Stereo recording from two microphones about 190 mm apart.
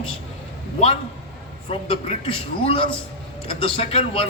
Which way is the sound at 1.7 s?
30° left (ahead or behind).